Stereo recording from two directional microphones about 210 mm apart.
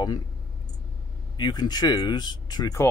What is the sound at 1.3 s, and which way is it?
Speech, 20° left (ahead or behind).